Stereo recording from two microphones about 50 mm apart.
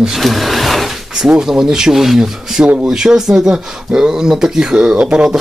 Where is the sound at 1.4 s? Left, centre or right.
Centre.